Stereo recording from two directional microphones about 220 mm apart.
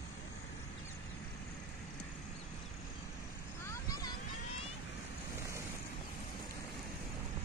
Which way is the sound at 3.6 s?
15° left (ahead or behind).